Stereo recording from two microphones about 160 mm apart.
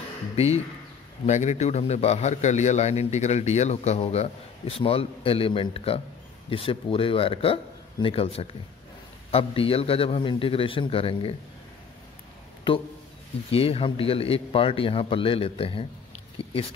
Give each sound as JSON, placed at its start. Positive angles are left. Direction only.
{"t": 1.2, "sound": "a man's voice", "side_deg": 45}
{"t": 12.7, "sound": "a man's voice", "side_deg": 30}
{"t": 16.4, "sound": "a sound", "side_deg": 35}